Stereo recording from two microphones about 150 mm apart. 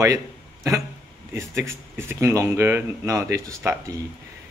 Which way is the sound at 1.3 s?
20° right (ahead or behind).